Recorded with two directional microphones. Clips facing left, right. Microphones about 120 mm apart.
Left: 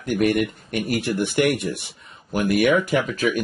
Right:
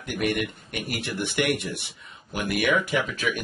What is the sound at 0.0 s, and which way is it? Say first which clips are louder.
Speech: left 7 dB; 40° left (ahead or behind).